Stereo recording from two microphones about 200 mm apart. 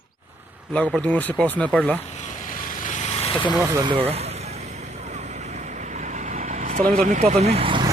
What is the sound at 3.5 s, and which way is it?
Vehicle, 15° right (ahead or behind).